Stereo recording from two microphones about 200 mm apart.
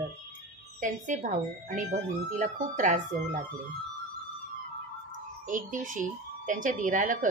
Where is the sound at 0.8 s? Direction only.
40° right (ahead or behind).